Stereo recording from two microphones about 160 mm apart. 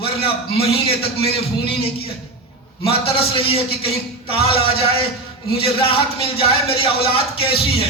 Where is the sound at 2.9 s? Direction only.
35° left (ahead or behind).